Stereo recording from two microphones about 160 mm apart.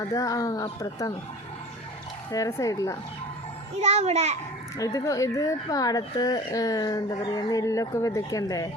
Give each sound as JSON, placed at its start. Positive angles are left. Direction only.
{"t": 0.1, "sound": "speech", "side_deg": 20}
{"t": 2.3, "sound": "speech", "side_deg": 20}
{"t": 3.8, "sound": "a child's voice", "side_deg": -45}
{"t": 4.8, "sound": "speech", "side_deg": 20}